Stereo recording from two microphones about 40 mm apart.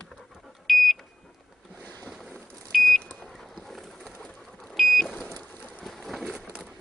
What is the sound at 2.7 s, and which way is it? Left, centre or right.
Beep, centre.